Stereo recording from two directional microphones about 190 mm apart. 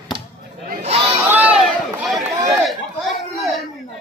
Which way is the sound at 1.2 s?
10° right (ahead or behind).